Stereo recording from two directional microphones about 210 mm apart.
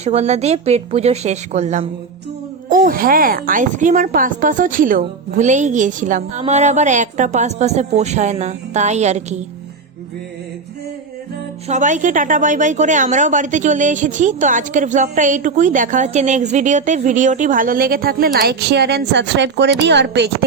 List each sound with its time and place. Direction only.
0.0 s speech: 30° right (ahead or behind)
11.7 s a woman's voice: 35° right (ahead or behind); by 20.3 s 55° right (ahead or behind)